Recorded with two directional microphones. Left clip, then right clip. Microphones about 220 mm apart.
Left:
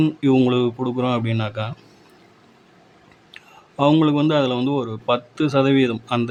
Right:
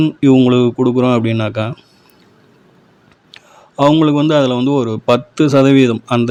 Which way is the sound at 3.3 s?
20° right (ahead or behind).